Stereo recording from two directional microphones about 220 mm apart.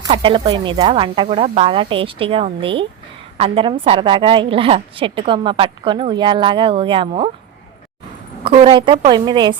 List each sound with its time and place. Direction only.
0.1 s a woman's voice: 20° right (ahead or behind)
8.4 s a woman's voice: 25° right (ahead or behind)